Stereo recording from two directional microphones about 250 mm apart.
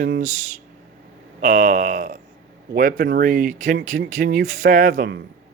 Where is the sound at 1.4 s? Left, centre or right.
Right.